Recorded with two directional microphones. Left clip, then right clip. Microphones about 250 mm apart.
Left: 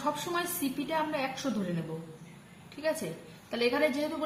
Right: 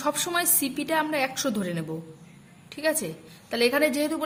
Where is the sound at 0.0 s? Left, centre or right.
Right.